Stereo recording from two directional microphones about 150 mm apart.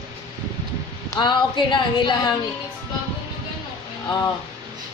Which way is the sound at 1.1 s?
30° left (ahead or behind).